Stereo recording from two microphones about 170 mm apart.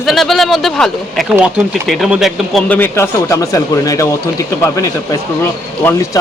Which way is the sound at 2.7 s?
15° left (ahead or behind).